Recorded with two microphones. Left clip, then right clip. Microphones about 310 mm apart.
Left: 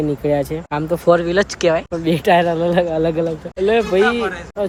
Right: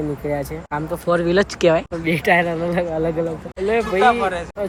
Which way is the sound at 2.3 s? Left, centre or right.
Left.